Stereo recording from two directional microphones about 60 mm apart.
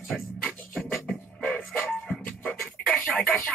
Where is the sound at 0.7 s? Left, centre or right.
Centre.